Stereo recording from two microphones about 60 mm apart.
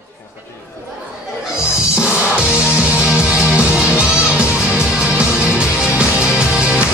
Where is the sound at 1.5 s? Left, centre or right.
Centre.